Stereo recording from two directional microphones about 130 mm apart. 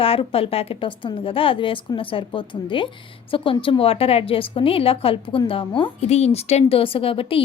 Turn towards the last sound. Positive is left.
turn(degrees=45)  # may be behind; listen again after turning